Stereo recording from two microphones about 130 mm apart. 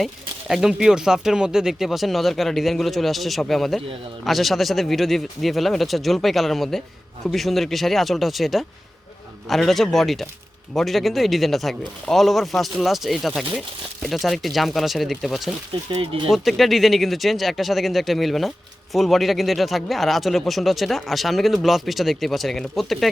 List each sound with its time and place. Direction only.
0.0 s speech: 5° right (ahead or behind)
16.0 s speech: 45° right (ahead or behind)
16.3 s speech: centre (ahead or behind)